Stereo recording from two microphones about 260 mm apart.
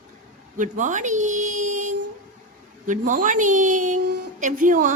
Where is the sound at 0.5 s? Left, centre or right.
Right.